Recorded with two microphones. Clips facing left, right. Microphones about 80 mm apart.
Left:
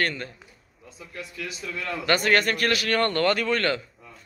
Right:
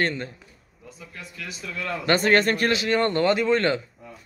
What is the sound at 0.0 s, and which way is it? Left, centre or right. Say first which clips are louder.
Speech: right 2 dB; right.